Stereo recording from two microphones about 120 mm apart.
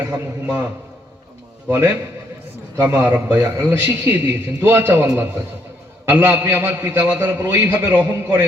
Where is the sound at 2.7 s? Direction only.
30° right (ahead or behind).